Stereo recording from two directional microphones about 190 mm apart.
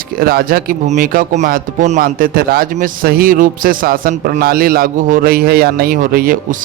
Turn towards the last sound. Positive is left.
turn(degrees=-50)  # may be behind; listen again after turning